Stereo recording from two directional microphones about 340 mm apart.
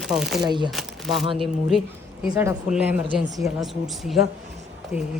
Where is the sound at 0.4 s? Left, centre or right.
Centre.